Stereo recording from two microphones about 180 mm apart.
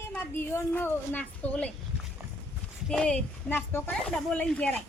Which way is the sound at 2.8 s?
5° left (ahead or behind).